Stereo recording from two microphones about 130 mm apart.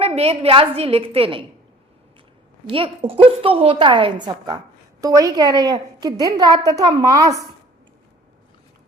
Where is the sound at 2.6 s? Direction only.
45° right (ahead or behind); by 7.2 s 30° right (ahead or behind).